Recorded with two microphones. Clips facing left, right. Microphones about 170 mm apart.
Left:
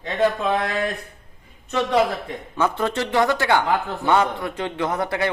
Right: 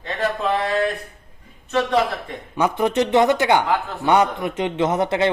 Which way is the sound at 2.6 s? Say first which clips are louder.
Right 3 dB; 15° right (ahead or behind).